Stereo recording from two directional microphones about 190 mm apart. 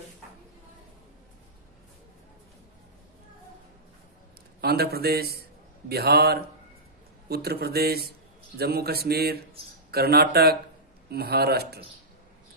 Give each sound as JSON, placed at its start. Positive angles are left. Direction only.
{"t": 4.6, "sound": "speech", "side_deg": -55}